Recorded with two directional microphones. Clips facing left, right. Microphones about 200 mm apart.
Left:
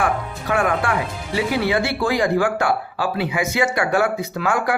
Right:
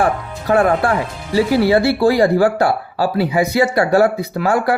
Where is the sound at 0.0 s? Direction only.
35° right (ahead or behind).